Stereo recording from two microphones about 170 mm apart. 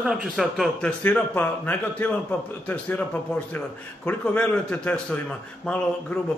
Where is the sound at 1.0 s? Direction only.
10° left (ahead or behind).